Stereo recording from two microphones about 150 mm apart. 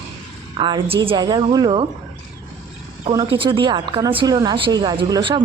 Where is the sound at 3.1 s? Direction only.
30° right (ahead or behind).